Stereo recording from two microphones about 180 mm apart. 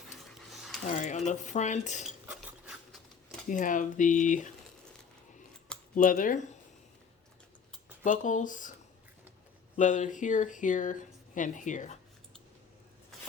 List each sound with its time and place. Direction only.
0.3 s a sound: centre (ahead or behind)
0.9 s cutlery: 40° left (ahead or behind)
2.0 s cutlery: 5° right (ahead or behind)
3.5 s speech: 45° left (ahead or behind)
5.9 s speech: 50° left (ahead or behind)
8.0 s speech: 45° left (ahead or behind)
9.7 s speech: 45° left (ahead or behind)